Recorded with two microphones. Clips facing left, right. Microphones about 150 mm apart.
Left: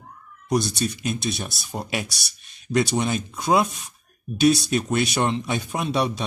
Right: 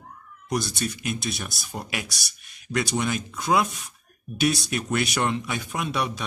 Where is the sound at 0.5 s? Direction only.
20° left (ahead or behind).